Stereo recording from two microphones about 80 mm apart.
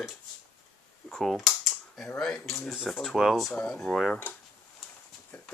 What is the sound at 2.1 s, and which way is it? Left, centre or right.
Speech, centre.